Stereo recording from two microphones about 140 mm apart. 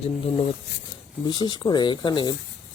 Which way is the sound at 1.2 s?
30° left (ahead or behind).